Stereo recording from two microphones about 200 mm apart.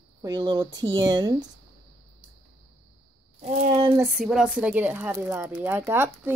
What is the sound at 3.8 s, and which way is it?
Speech, 15° right (ahead or behind).